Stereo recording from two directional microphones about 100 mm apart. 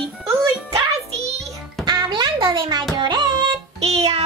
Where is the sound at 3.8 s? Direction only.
90° right.